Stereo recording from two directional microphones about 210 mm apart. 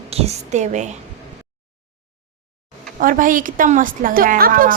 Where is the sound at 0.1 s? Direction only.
30° right (ahead or behind).